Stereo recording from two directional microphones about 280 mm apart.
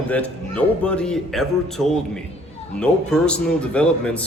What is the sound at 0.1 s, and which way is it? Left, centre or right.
A man's voice, centre.